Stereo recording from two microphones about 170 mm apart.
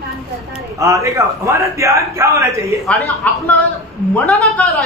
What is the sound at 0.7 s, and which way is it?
A man's voice, 20° right (ahead or behind).